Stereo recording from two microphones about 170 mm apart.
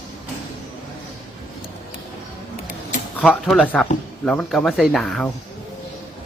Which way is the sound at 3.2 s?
5° left (ahead or behind).